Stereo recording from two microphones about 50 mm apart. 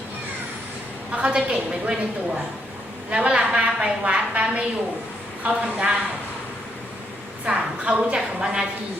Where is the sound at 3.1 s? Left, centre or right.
Right.